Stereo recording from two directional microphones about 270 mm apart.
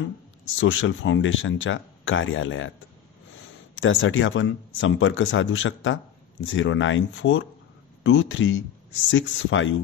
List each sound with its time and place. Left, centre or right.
0.6 s speech: left
3.7 s speech: left